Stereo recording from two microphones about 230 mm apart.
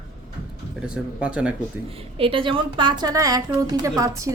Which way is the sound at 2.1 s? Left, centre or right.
Right.